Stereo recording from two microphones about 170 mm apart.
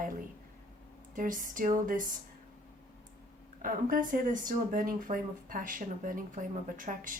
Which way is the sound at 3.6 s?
55° right (ahead or behind).